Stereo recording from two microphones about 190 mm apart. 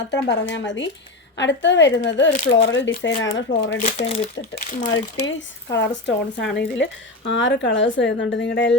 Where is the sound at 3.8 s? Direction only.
35° left (ahead or behind).